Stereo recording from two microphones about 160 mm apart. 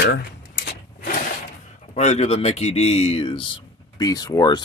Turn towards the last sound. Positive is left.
turn(degrees=25)  # may be behind; listen again after turning